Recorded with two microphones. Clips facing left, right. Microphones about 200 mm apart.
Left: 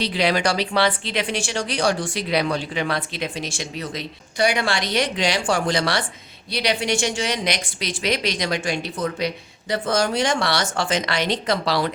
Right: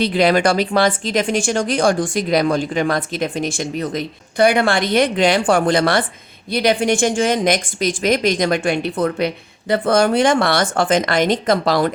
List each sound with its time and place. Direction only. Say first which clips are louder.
0.0 s speech: right 6 dB; 50° right (ahead or behind)